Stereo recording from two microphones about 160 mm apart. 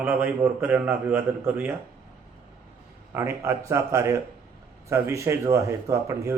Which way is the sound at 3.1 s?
15° right (ahead or behind).